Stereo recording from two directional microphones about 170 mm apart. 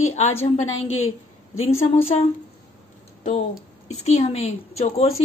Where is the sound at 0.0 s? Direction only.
40° left (ahead or behind).